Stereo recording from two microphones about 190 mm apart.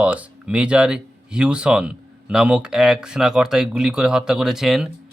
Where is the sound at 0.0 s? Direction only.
5° right (ahead or behind).